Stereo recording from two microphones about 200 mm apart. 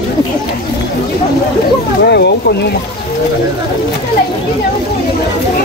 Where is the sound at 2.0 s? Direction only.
55° left (ahead or behind).